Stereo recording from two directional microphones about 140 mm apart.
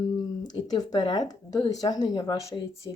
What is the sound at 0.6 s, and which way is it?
Speech, 30° left (ahead or behind).